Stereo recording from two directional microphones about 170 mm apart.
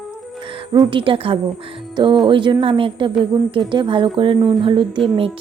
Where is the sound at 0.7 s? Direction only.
30° right (ahead or behind).